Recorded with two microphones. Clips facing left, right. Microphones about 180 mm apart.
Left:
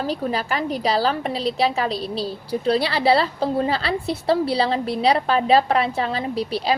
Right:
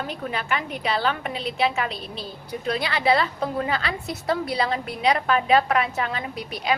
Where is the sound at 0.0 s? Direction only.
35° left (ahead or behind).